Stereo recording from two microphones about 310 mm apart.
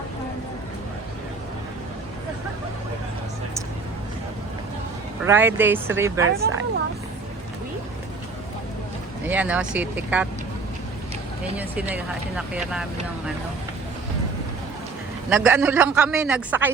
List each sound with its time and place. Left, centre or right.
5.2 s speech: centre
6.2 s speech: right
9.2 s speech: centre
11.5 s speech: centre
15.3 s speech: centre